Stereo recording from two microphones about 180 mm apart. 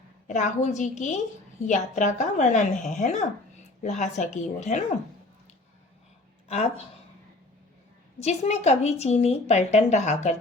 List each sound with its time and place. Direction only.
0.3 s a woman's voice: 40° left (ahead or behind)
6.5 s a woman's voice: 40° left (ahead or behind)
8.2 s a woman's voice: 35° left (ahead or behind)